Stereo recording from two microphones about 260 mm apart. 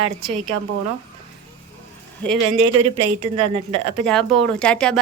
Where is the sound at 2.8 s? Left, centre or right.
Right.